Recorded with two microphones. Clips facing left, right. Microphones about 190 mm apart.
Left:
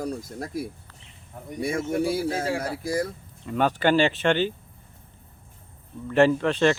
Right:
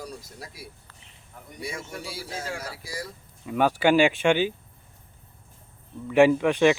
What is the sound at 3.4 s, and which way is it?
Speech, 10° right (ahead or behind).